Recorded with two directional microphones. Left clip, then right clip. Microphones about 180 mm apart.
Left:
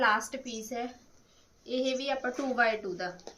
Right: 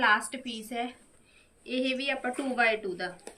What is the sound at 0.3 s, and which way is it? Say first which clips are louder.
A woman's voice: even; 10° left (ahead or behind).